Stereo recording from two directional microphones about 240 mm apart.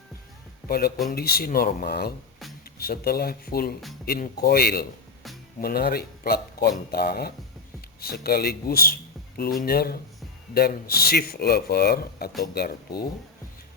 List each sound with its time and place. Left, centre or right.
0.7 s a man's voice: left